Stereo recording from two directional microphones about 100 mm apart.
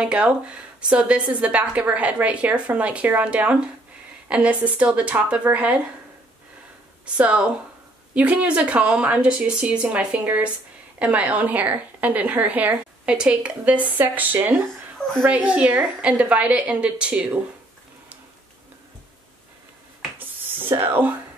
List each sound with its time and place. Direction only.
0.0 s a woman's voice: 10° right (ahead or behind)
7.2 s a woman's voice: 10° right (ahead or behind)
20.5 s speech: 20° right (ahead or behind)